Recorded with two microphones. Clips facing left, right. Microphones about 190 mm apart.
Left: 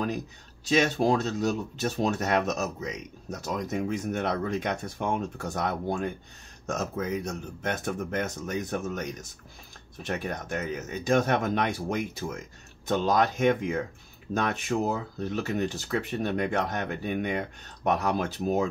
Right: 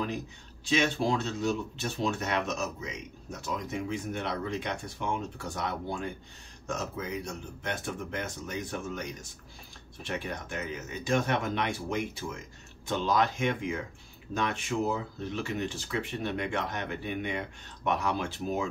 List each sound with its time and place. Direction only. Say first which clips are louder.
0.7 s speech: left 4 dB; 40° left (ahead or behind)